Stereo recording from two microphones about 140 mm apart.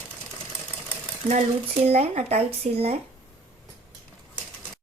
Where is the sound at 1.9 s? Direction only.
45° right (ahead or behind).